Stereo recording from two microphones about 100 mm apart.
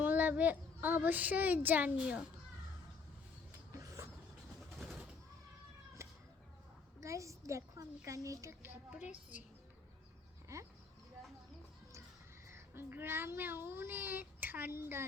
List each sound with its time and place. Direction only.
0.0 s a child's voice: 20° right (ahead or behind)
3.5 s a sound: 35° right (ahead or behind)
6.0 s a sound: 30° right (ahead or behind)
7.0 s a child's voice: 30° right (ahead or behind)
8.9 s a woman's voice: 10° right (ahead or behind)
12.5 s speech: 25° right (ahead or behind)